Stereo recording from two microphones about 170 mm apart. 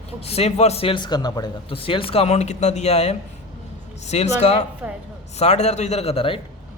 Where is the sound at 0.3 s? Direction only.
35° left (ahead or behind).